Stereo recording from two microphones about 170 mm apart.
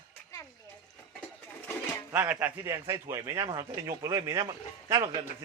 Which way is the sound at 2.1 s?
10° right (ahead or behind).